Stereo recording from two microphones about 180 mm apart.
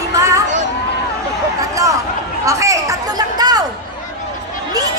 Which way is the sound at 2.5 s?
15° right (ahead or behind).